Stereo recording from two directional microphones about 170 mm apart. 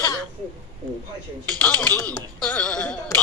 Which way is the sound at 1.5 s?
10° left (ahead or behind).